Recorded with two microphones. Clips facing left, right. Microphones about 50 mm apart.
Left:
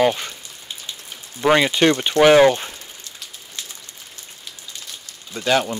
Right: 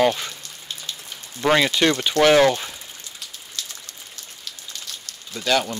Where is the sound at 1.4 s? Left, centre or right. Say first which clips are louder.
Left 2 dB; centre.